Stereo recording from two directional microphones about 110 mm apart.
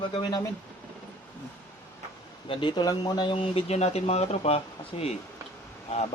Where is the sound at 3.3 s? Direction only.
60° left (ahead or behind).